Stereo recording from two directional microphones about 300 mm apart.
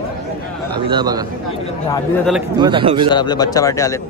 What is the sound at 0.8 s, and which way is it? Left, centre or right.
Speech, centre.